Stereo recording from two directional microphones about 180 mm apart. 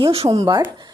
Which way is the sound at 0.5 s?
20° right (ahead or behind).